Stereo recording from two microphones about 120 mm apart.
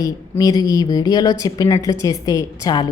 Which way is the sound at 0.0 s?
30° left (ahead or behind).